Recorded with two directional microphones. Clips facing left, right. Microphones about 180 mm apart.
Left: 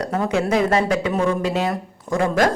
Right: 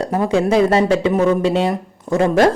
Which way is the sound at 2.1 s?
25° right (ahead or behind).